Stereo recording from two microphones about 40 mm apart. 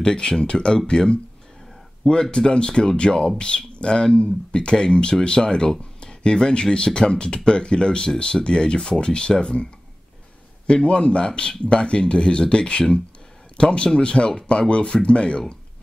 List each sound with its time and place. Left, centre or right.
0.0 s speech: centre
2.3 s speech: left
10.7 s a man's voice: left